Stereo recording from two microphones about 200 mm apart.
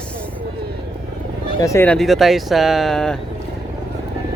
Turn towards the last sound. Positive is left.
turn(degrees=0)  # may be behind; listen again after turning